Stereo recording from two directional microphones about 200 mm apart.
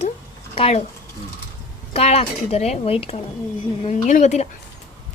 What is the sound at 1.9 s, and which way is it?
Speech, 35° left (ahead or behind).